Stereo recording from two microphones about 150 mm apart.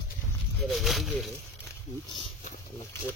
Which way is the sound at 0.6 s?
Centre (ahead or behind).